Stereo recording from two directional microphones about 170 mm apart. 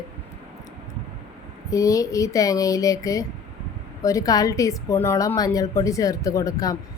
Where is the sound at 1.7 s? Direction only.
20° left (ahead or behind).